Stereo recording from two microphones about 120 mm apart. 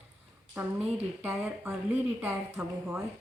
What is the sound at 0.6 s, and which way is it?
Speech, 20° right (ahead or behind).